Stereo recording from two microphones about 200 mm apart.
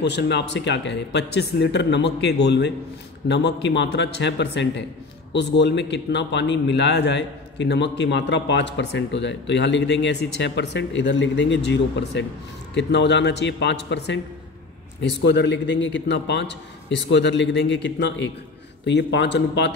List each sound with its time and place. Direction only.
0.0 s a man's voice: 60° left (ahead or behind)